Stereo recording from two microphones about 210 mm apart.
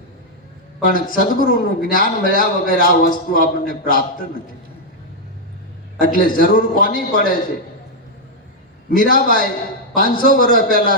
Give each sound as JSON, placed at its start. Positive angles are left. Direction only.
{"t": 0.9, "sound": "a man's voice", "side_deg": 40}
{"t": 6.0, "sound": "a man's voice", "side_deg": 40}
{"t": 9.0, "sound": "a man's voice", "side_deg": 40}